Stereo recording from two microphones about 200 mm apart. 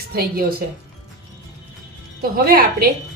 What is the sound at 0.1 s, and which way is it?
Speech, 50° right (ahead or behind).